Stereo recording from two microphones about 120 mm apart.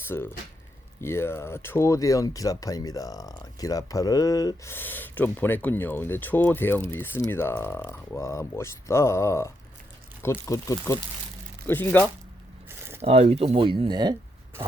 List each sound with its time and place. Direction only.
0.1 s speech: 20° left (ahead or behind)
4.7 s speech: 15° left (ahead or behind)
13.0 s speech: 65° right (ahead or behind); by 14.2 s 35° right (ahead or behind)